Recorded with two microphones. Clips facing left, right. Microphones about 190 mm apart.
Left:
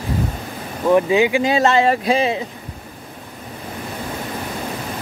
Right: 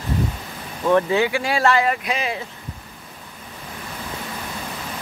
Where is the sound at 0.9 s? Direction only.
15° left (ahead or behind).